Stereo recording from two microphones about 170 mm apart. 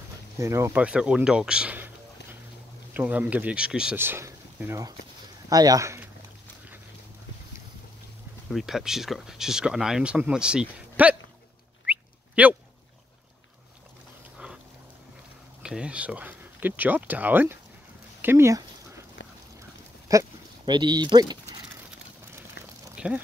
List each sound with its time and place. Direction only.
0.4 s speech: 15° right (ahead or behind)
0.8 s speech: 5° right (ahead or behind)
2.9 s speech: 10° right (ahead or behind)
8.5 s speech: centre (ahead or behind)
11.8 s a sound: 10° right (ahead or behind)
15.6 s speech: 5° right (ahead or behind)
20.1 s speech: 20° right (ahead or behind)
22.9 s a sound: 5° right (ahead or behind)